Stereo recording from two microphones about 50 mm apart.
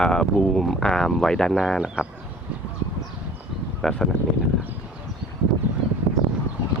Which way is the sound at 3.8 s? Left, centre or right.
Centre.